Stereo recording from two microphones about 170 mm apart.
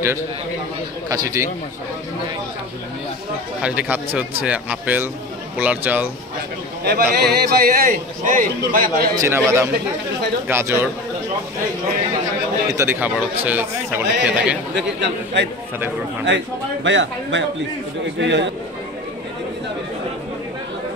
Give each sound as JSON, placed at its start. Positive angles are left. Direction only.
{"t": 1.0, "sound": "speech", "side_deg": -20}
{"t": 3.6, "sound": "speech", "side_deg": -10}
{"t": 6.8, "sound": "a man's voice", "side_deg": -65}
{"t": 9.1, "sound": "speech", "side_deg": -15}
{"t": 12.7, "sound": "speech", "side_deg": -10}
{"t": 14.8, "sound": "a man's voice", "side_deg": -90}
{"t": 16.8, "sound": "a man's voice", "side_deg": -90}